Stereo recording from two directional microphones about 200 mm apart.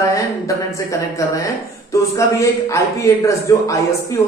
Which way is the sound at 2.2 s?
15° left (ahead or behind).